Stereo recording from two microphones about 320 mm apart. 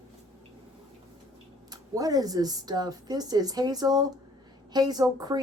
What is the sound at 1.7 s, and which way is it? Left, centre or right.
Speech, centre.